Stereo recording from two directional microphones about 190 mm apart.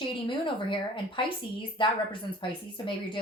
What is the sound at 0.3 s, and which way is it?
A woman's voice, 25° left (ahead or behind).